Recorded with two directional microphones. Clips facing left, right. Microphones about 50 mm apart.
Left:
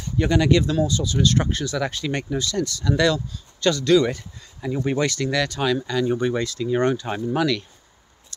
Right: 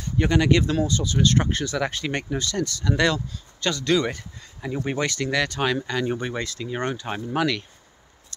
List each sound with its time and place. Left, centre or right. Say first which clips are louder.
0.2 s speech: left 1 dB; right
0.7 s speech: left 1 dB; right
4.6 s speech: left 3 dB; centre
6.7 s speech: left 7 dB; centre